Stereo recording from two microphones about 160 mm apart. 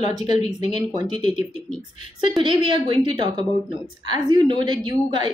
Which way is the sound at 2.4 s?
30° right (ahead or behind).